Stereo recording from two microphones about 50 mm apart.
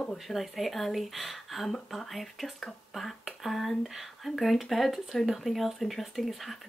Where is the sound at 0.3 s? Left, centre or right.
Centre.